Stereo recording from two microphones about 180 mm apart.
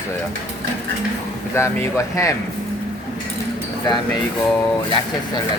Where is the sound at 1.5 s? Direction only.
15° left (ahead or behind).